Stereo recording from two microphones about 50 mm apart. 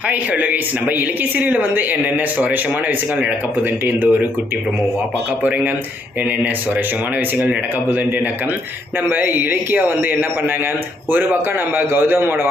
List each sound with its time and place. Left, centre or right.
0.1 s speech: right
5.4 s speech: right
7.3 s a man's voice: right